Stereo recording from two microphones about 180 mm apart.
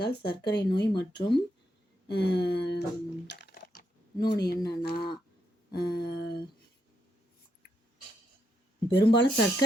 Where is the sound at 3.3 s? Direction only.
70° left (ahead or behind).